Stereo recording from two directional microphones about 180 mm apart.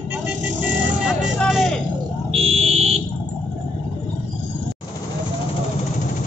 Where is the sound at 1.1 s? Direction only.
Centre (ahead or behind).